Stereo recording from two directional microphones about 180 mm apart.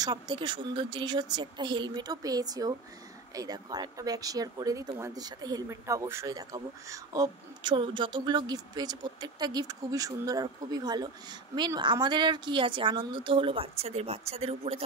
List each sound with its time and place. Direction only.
0.0 s speech: 25° right (ahead or behind)